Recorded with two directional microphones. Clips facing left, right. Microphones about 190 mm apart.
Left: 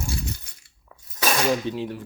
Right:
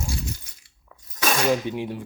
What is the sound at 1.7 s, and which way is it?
Speech, 15° right (ahead or behind).